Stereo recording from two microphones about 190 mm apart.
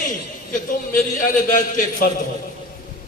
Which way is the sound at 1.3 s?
45° left (ahead or behind).